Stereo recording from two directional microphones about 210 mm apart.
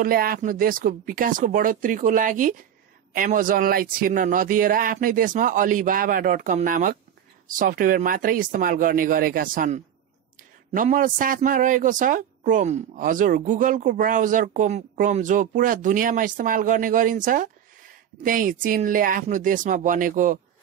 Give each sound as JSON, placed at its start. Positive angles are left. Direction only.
{"t": 0.0, "sound": "a woman's voice", "side_deg": -45}